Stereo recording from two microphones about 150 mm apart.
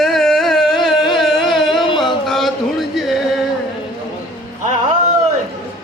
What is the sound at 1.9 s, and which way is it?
Music, centre (ahead or behind).